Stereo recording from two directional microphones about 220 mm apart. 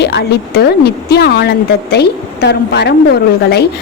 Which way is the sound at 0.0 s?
50° left (ahead or behind).